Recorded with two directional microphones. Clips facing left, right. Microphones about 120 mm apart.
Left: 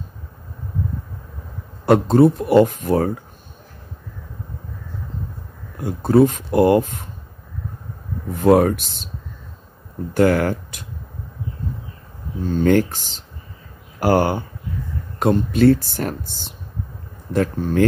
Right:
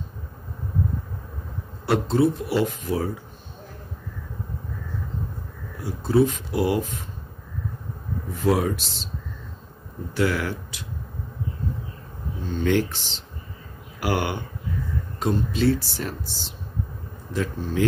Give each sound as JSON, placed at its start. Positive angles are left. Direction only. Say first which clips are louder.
{"t": 1.9, "sound": "speech", "louder": "left 7 dB", "side_deg": 50}
{"t": 5.8, "sound": "speech", "louder": "left 6 dB", "side_deg": 55}
{"t": 8.4, "sound": "speech", "louder": "left 8 dB", "side_deg": 55}
{"t": 10.1, "sound": "speech", "louder": "left 8 dB", "side_deg": 50}
{"t": 12.4, "sound": "speech", "louder": "left 6 dB", "side_deg": 45}
{"t": 15.1, "sound": "speech", "louder": "left 7 dB", "side_deg": 55}